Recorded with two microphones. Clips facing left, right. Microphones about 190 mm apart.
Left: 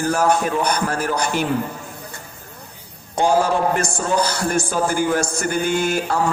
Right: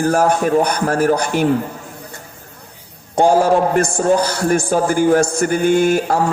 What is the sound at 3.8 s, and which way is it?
Speech, 55° right (ahead or behind).